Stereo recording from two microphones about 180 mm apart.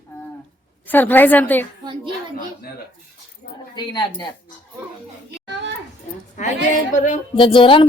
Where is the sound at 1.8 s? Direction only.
25° right (ahead or behind).